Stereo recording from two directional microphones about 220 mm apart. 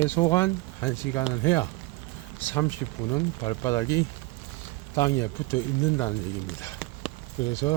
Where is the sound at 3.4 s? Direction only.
20° left (ahead or behind).